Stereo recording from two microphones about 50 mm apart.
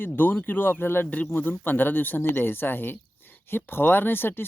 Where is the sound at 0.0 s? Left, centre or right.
Left.